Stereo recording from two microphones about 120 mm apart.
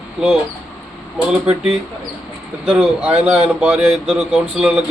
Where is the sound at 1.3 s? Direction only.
5° right (ahead or behind).